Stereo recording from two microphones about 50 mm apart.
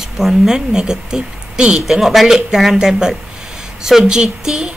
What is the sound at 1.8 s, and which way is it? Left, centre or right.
A woman's voice, centre.